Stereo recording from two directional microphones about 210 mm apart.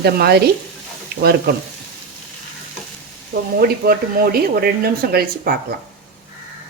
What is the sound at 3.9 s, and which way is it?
Sizzle, 45° right (ahead or behind).